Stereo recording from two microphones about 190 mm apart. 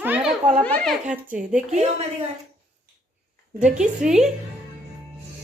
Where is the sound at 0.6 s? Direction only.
5° left (ahead or behind).